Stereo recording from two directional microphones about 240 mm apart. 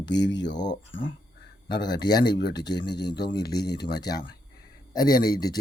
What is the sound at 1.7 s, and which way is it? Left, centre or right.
Speech, centre.